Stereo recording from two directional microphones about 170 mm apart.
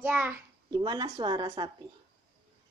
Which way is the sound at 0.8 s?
25° right (ahead or behind).